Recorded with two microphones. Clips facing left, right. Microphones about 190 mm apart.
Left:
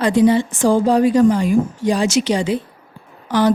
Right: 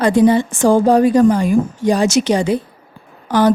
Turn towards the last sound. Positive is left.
turn(degrees=-45)  # may be behind; listen again after turning